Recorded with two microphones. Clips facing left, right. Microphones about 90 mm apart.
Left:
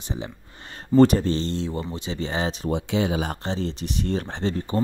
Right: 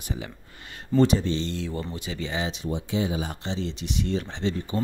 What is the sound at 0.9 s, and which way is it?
Speech, 45° left (ahead or behind).